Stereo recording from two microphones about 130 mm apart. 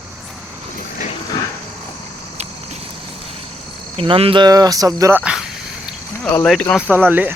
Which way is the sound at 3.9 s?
45° right (ahead or behind).